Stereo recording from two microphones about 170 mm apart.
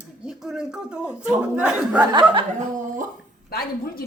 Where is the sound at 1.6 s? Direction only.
5° right (ahead or behind).